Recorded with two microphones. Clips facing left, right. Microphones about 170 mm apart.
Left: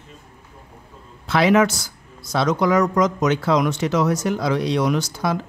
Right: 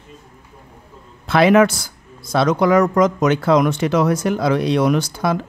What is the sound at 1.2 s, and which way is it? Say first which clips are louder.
Speech: right 4 dB; 55° right (ahead or behind).